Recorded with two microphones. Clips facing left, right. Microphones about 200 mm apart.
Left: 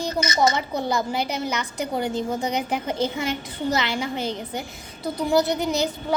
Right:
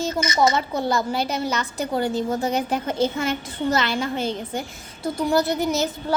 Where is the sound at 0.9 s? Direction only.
15° left (ahead or behind).